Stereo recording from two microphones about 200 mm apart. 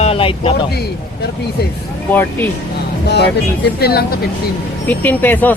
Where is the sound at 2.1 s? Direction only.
10° left (ahead or behind).